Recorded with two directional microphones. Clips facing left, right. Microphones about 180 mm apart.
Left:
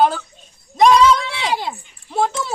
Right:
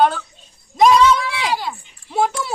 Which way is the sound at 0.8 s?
Centre (ahead or behind).